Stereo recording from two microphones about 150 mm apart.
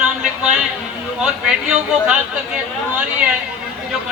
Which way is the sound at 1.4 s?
5° right (ahead or behind).